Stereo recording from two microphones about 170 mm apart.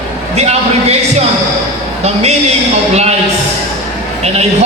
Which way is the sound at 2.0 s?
40° right (ahead or behind).